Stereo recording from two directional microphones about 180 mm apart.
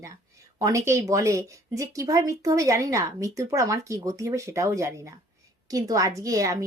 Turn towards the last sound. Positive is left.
turn(degrees=-20)  # may be behind; listen again after turning